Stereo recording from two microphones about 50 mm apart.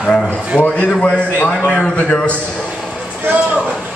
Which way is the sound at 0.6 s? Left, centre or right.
Left.